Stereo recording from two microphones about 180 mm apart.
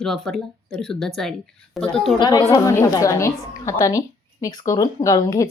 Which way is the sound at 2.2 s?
20° left (ahead or behind).